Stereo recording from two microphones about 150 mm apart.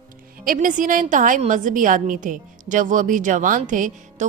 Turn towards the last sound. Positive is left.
turn(degrees=-55)  # may be behind; listen again after turning